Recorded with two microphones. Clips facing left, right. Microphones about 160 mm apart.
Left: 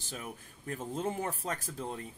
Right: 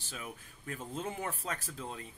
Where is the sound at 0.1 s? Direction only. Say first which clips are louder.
Left 2 dB; 40° left (ahead or behind).